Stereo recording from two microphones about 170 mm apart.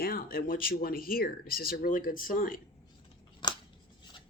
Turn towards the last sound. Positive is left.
turn(degrees=30)  # may be behind; listen again after turning